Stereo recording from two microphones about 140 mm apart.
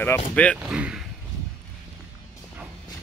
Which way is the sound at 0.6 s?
5° right (ahead or behind).